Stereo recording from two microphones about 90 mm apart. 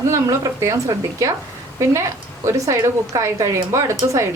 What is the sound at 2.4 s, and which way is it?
A woman's voice, 35° right (ahead or behind).